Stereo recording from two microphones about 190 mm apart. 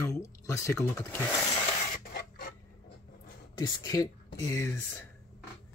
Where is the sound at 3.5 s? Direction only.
20° left (ahead or behind).